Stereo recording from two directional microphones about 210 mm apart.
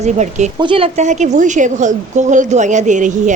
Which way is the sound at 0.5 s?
25° right (ahead or behind).